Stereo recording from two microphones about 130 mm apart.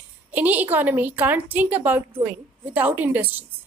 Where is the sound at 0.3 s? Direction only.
10° right (ahead or behind).